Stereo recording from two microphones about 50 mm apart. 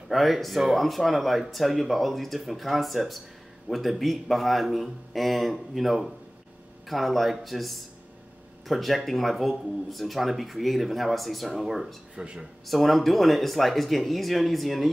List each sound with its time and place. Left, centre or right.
0.1 s speech: centre
12.2 s speech: centre
12.6 s speech: centre